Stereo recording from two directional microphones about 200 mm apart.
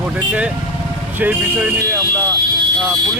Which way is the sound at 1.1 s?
10° right (ahead or behind).